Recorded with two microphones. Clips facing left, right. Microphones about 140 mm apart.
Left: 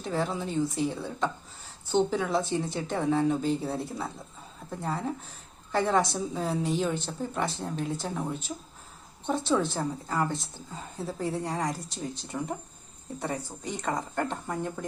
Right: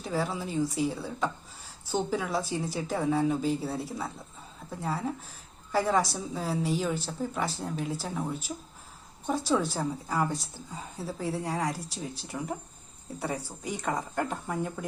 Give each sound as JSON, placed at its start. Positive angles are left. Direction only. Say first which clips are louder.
{"t": 0.0, "sound": "a woman's voice", "louder": "left 1 dB", "side_deg": -5}